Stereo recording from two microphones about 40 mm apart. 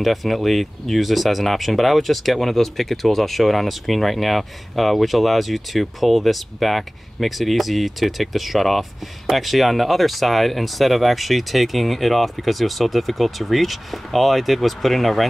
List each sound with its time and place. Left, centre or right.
0.0 s speech: centre